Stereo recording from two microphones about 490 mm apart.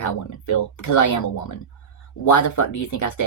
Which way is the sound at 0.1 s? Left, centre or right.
Left.